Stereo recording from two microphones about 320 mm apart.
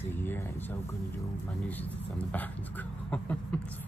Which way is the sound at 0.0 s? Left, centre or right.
Centre.